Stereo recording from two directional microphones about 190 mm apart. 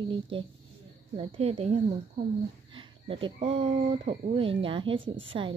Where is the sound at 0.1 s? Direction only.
25° right (ahead or behind).